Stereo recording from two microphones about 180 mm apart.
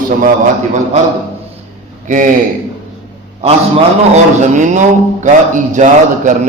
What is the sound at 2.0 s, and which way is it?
Speech, 45° right (ahead or behind).